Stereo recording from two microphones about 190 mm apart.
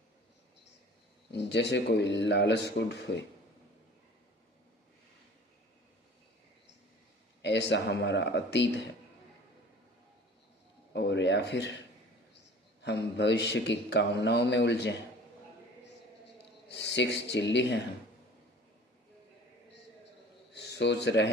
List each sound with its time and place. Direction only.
1.3 s a man's voice: 65° left (ahead or behind)
7.4 s speech: 65° left (ahead or behind)
10.9 s a man's voice: 65° left (ahead or behind)
12.8 s a man's voice: 65° left (ahead or behind)
16.6 s a man's voice: 65° left (ahead or behind)
20.5 s a sound: 65° left (ahead or behind)